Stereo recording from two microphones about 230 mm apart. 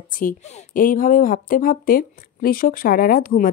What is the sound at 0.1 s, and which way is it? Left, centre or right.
Speech, left.